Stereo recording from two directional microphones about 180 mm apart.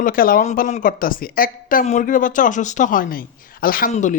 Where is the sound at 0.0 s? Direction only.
50° left (ahead or behind).